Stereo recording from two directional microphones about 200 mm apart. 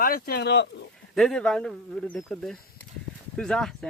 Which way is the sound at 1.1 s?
Centre (ahead or behind).